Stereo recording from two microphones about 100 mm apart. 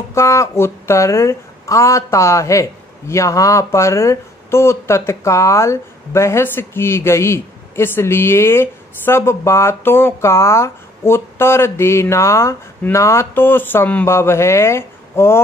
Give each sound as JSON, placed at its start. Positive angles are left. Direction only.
{"t": 0.1, "sound": "speech", "side_deg": 30}